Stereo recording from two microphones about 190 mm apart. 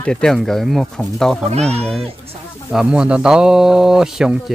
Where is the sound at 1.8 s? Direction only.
5° left (ahead or behind).